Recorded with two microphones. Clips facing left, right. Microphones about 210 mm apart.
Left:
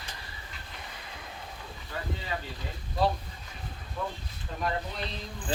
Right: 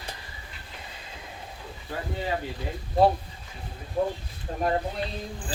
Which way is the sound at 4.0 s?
40° right (ahead or behind).